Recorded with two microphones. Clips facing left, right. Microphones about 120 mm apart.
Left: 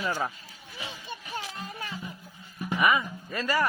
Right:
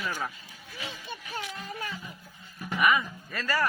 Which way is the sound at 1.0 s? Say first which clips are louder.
Left 1 dB; 30° left (ahead or behind).